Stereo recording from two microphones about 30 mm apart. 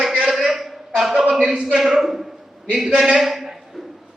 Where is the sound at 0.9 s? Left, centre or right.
Centre.